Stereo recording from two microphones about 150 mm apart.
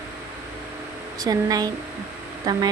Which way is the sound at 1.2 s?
25° right (ahead or behind).